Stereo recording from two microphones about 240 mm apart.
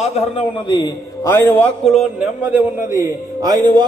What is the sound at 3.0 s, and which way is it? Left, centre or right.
Speech, centre.